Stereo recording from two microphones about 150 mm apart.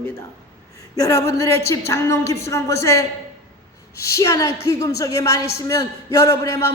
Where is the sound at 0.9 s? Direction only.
20° left (ahead or behind).